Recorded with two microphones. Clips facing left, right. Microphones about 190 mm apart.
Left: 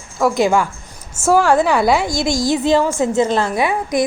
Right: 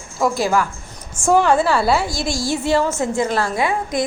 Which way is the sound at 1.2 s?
5° left (ahead or behind).